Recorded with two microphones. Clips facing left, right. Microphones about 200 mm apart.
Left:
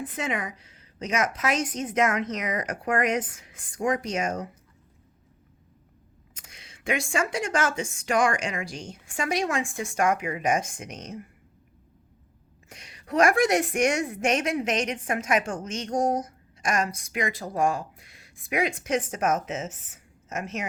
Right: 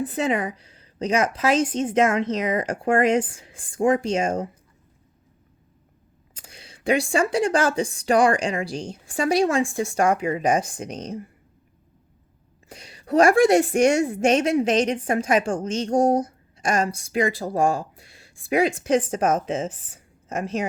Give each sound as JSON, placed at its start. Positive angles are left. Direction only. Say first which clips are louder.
{"t": 0.0, "sound": "a woman's voice", "louder": "right 7 dB", "side_deg": -35}
{"t": 6.3, "sound": "a woman's voice", "louder": "right 6 dB", "side_deg": -35}
{"t": 12.6, "sound": "a woman's voice", "louder": "right 7 dB", "side_deg": -30}